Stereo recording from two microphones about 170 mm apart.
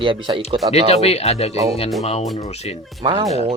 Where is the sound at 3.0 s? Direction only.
30° right (ahead or behind).